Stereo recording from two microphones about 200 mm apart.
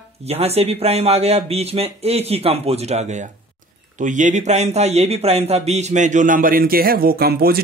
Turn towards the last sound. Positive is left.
turn(degrees=-50)  # may be behind; listen again after turning